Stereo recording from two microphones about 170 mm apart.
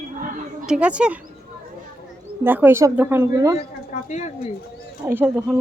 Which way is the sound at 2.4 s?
10° right (ahead or behind).